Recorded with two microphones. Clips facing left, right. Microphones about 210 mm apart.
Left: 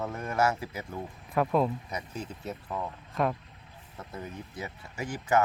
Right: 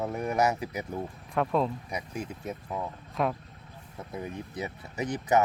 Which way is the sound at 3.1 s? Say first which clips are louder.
Even; centre (ahead or behind).